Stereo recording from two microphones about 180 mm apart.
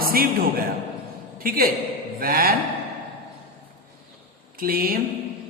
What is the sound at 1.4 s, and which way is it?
A man's voice, 55° right (ahead or behind).